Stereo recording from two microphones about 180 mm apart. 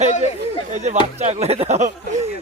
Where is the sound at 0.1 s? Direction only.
40° left (ahead or behind).